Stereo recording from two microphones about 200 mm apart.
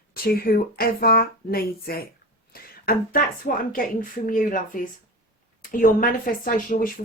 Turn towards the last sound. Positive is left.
turn(degrees=45)  # may be behind; listen again after turning